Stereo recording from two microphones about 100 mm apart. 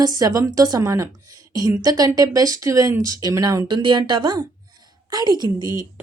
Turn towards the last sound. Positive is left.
turn(degrees=-45)  # may be behind; listen again after turning